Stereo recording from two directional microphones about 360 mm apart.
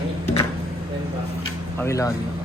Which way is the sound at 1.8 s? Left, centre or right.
Centre.